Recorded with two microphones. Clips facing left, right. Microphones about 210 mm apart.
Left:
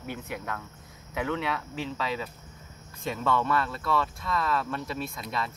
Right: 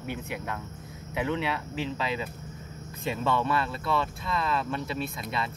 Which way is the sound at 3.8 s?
25° right (ahead or behind).